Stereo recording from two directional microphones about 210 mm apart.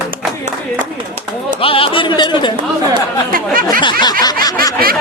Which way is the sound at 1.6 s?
25° left (ahead or behind).